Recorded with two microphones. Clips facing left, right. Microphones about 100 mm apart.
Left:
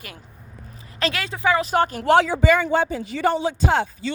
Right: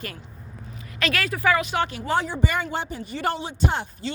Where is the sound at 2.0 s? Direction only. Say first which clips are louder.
Left 8 dB; 80° left.